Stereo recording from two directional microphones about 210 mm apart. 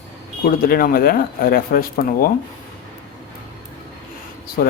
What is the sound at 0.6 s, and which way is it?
Speech, 45° left (ahead or behind).